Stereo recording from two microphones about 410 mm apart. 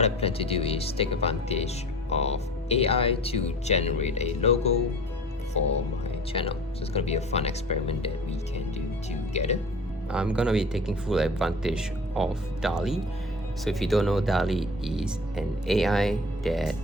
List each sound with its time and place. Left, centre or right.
0.0 s speech: centre
6.3 s speech: centre
9.3 s speech: centre
10.1 s speech: centre